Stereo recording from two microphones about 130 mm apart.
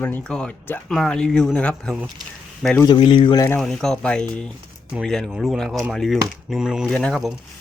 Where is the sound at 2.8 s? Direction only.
35° left (ahead or behind).